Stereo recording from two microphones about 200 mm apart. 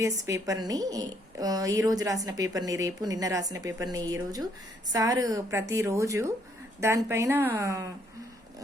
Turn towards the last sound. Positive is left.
turn(degrees=-15)  # may be behind; listen again after turning